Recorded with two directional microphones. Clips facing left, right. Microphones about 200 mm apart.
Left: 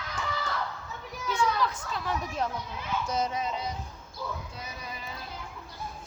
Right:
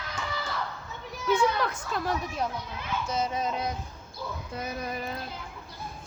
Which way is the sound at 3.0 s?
5° right (ahead or behind).